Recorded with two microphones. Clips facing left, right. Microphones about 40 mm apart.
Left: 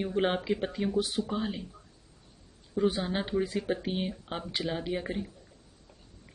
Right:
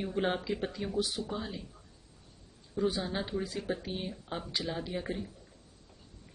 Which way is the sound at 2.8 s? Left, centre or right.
Left.